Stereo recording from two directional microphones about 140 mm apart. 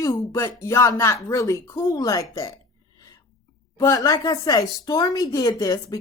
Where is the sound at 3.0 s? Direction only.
25° left (ahead or behind).